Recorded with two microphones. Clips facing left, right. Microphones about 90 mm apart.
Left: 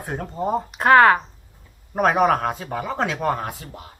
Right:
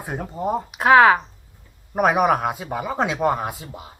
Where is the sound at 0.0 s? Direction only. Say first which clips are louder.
Even; 5° right (ahead or behind).